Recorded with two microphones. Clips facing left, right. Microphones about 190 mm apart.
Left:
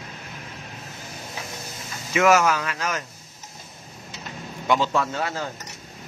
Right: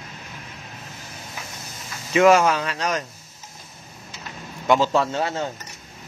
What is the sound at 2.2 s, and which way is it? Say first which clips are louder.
Speech: right 3 dB; 30° right (ahead or behind).